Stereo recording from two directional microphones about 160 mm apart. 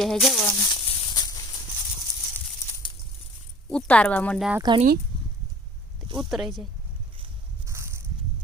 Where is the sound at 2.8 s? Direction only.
30° left (ahead or behind).